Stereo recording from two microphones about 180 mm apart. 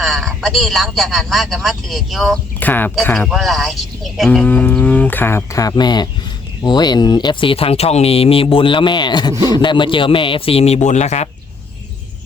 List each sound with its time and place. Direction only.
0.0 s a man's voice: centre (ahead or behind)
2.9 s cattle: 5° left (ahead or behind); by 6.1 s 25° left (ahead or behind)
6.7 s speech: 25° left (ahead or behind); by 11.3 s 40° left (ahead or behind)